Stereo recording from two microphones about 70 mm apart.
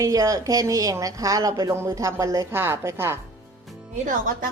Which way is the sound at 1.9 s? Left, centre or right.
Right.